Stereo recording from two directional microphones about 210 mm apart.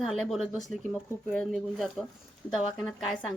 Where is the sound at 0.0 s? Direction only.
Centre (ahead or behind).